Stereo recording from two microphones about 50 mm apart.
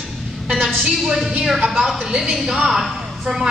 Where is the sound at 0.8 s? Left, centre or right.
Centre.